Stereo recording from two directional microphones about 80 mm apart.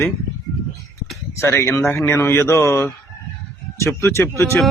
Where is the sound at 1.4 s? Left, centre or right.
Left.